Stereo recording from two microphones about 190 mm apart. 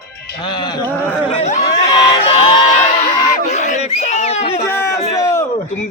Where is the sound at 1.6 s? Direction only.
20° left (ahead or behind).